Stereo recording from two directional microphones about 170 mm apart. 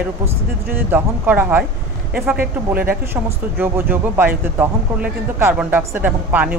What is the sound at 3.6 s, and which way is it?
Speech, 10° right (ahead or behind).